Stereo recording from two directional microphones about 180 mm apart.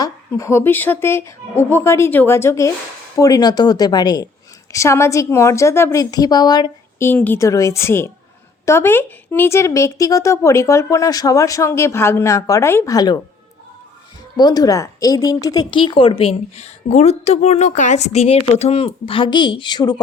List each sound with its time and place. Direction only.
0.0 s a woman's voice: 15° left (ahead or behind)
7.1 s a woman's voice: 10° left (ahead or behind)
14.3 s speech: 20° left (ahead or behind)